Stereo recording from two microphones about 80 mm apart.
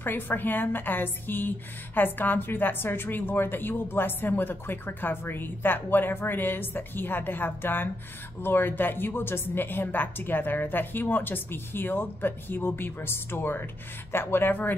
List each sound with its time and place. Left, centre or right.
0.0 s a woman's voice: left